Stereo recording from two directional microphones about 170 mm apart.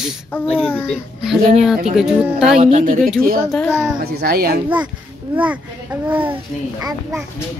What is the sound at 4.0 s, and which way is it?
Speech, 70° right (ahead or behind).